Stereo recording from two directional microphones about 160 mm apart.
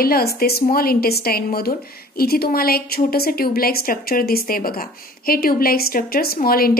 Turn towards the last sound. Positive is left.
turn(degrees=65)  # may be behind; listen again after turning